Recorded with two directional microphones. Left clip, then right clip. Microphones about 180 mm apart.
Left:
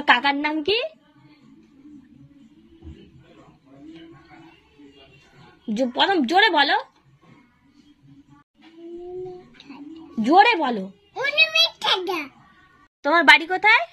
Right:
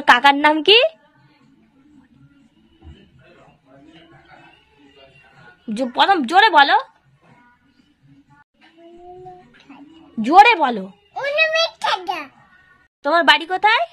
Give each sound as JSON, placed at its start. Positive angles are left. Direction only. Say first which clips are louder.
{"t": 0.1, "sound": "a woman's voice", "louder": "right 7 dB", "side_deg": -60}
{"t": 5.7, "sound": "a woman's voice", "louder": "right 5 dB", "side_deg": -40}
{"t": 10.2, "sound": "a woman's voice", "louder": "right 5 dB", "side_deg": -50}
{"t": 11.1, "sound": "a sound", "louder": "right 1 dB", "side_deg": -25}
{"t": 13.0, "sound": "speech", "louder": "even", "side_deg": -20}